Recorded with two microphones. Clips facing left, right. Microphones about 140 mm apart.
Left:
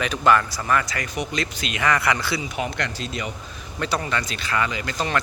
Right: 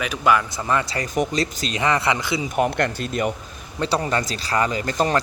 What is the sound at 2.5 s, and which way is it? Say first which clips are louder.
Speech: right 7 dB; 50° right (ahead or behind).